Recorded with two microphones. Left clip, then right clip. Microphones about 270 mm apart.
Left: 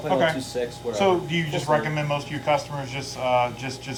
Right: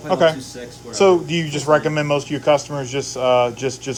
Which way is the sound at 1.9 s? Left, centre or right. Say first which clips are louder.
Right 7 dB; left.